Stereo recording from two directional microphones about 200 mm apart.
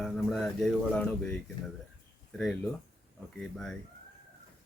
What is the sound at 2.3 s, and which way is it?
A man's voice, 5° left (ahead or behind).